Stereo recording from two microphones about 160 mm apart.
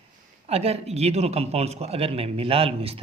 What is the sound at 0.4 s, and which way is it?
A man's voice, 40° right (ahead or behind).